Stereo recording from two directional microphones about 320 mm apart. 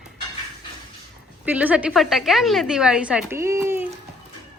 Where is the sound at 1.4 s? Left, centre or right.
Centre.